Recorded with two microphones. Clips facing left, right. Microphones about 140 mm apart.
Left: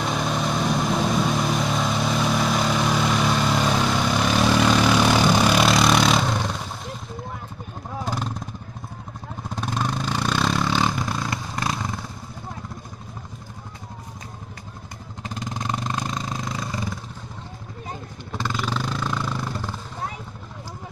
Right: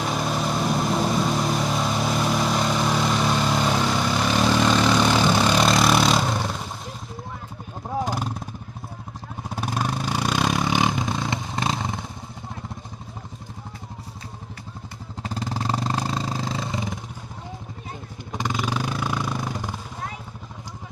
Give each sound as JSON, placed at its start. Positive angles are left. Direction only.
{"t": 0.0, "sound": "vehicle", "side_deg": -5}
{"t": 8.0, "sound": "vehicle", "side_deg": -10}
{"t": 9.6, "sound": "vehicle", "side_deg": -10}
{"t": 15.2, "sound": "vehicle", "side_deg": -35}
{"t": 18.3, "sound": "vehicle", "side_deg": -15}